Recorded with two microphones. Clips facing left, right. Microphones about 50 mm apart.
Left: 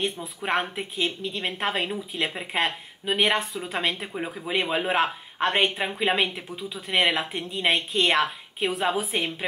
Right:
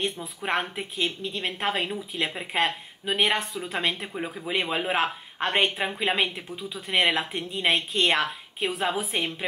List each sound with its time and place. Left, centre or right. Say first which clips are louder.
0.0 s a woman's voice: left 1 dB; centre